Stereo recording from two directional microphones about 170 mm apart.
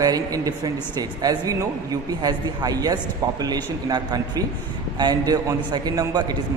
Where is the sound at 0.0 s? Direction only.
20° right (ahead or behind).